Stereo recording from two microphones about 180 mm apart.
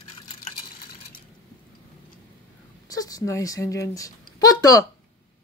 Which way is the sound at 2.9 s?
20° left (ahead or behind).